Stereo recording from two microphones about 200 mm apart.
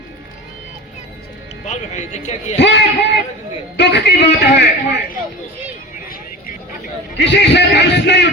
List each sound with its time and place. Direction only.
1.6 s speech: 35° left (ahead or behind)
2.6 s a man's voice: 60° left (ahead or behind)
7.3 s a man's voice: 60° left (ahead or behind)